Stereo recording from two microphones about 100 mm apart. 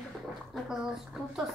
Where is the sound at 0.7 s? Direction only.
5° right (ahead or behind).